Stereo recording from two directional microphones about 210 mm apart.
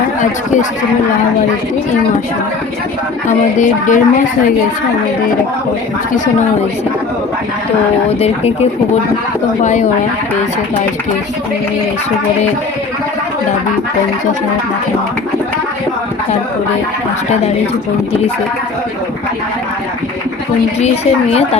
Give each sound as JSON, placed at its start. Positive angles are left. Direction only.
{"t": 3.2, "sound": "a woman's voice", "side_deg": 35}
{"t": 8.2, "sound": "a woman's voice", "side_deg": 30}
{"t": 20.8, "sound": "a woman's voice", "side_deg": 30}